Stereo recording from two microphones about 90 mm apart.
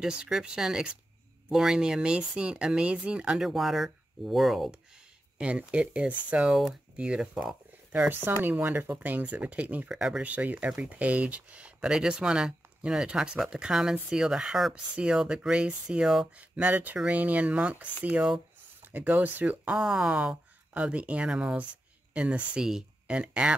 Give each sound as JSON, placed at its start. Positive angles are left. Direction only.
{"t": 0.0, "sound": "speech", "side_deg": -10}
{"t": 5.4, "sound": "speech", "side_deg": -15}
{"t": 8.1, "sound": "speech", "side_deg": -20}